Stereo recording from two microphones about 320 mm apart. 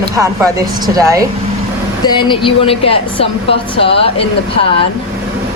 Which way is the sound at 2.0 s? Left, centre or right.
Centre.